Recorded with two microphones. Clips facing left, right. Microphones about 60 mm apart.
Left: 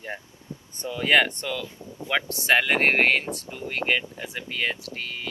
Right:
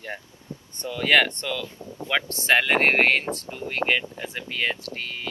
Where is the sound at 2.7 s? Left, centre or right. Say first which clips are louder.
Right 1 dB; centre.